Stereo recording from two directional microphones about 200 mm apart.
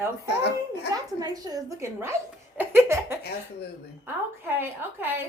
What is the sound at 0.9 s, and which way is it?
A woman's voice, 20° right (ahead or behind).